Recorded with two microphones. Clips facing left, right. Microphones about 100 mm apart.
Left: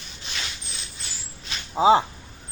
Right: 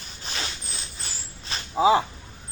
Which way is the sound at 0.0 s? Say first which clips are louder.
Right 2 dB; 40° right (ahead or behind).